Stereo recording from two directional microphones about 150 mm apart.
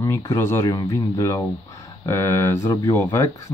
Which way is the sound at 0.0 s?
20° left (ahead or behind).